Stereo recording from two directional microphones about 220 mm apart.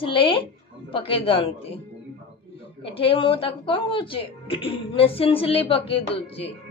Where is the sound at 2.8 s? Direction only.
25° left (ahead or behind).